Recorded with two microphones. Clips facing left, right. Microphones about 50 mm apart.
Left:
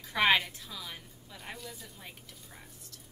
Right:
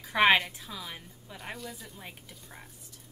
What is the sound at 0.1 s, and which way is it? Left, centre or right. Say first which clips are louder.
Music: right 3 dB; centre.